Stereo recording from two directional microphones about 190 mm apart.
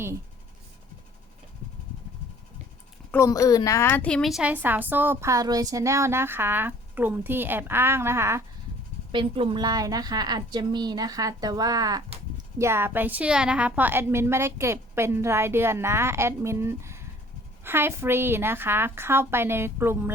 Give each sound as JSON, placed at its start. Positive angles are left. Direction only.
{"t": 3.1, "sound": "a woman's voice", "side_deg": 15}
{"t": 9.1, "sound": "a woman's voice", "side_deg": -30}